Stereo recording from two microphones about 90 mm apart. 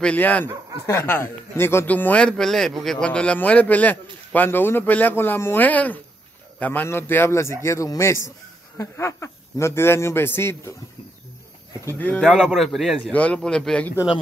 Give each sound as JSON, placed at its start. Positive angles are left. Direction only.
{"t": 0.0, "sound": "speech", "side_deg": 15}
{"t": 12.0, "sound": "speech", "side_deg": 15}
{"t": 12.5, "sound": "a man's voice", "side_deg": 0}
{"t": 13.1, "sound": "speech", "side_deg": 15}